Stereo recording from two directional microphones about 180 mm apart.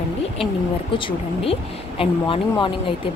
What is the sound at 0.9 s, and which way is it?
Speech, 30° left (ahead or behind).